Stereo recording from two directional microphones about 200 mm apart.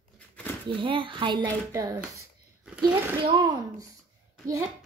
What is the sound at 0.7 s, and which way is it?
A woman's voice, 25° right (ahead or behind).